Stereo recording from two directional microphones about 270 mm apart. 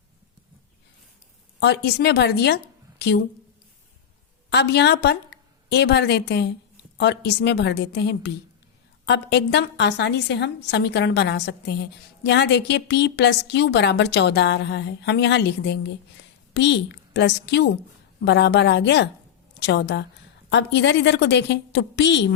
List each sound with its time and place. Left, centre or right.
1.5 s a woman's voice: left
4.4 s a woman's voice: left